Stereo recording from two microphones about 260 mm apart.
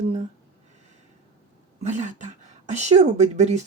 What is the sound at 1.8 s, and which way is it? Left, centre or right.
Speech, right.